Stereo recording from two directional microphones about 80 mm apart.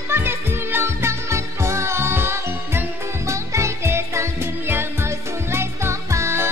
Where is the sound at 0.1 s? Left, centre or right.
Right.